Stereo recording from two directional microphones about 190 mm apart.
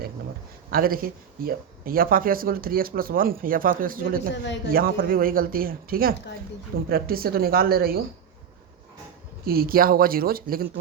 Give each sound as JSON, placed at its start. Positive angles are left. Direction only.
{"t": 0.7, "sound": "speech", "side_deg": -50}
{"t": 9.4, "sound": "speech", "side_deg": -50}